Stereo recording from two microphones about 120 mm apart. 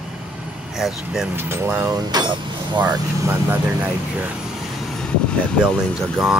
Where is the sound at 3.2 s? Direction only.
20° right (ahead or behind).